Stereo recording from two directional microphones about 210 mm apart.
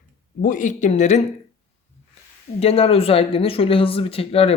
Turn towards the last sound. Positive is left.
turn(degrees=30)  # may be behind; listen again after turning